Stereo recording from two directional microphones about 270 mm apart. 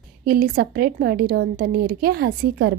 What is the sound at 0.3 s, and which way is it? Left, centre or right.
A woman's voice, right.